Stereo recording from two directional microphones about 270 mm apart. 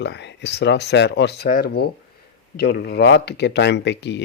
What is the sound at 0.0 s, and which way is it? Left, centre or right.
Speech, left.